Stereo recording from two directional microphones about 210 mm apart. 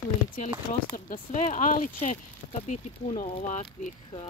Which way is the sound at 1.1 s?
35° left (ahead or behind).